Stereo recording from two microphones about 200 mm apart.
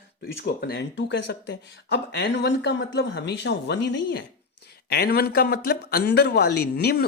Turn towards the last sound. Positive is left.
turn(degrees=50)  # may be behind; listen again after turning